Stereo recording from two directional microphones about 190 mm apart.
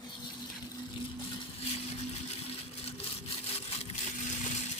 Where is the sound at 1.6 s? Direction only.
35° left (ahead or behind).